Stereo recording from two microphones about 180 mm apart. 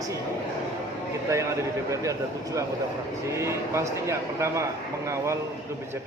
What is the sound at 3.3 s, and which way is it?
Speech, 15° right (ahead or behind).